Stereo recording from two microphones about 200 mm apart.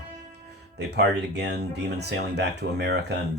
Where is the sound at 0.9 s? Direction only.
55° right (ahead or behind).